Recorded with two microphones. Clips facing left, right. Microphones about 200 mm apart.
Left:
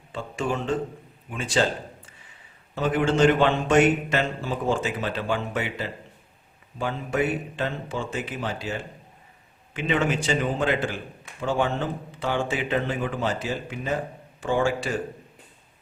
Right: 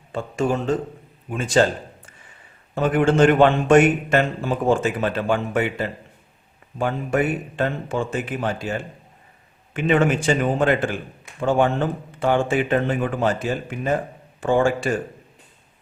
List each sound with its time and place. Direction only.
0.1 s a man's voice: 45° right (ahead or behind)
2.7 s a man's voice: 50° right (ahead or behind)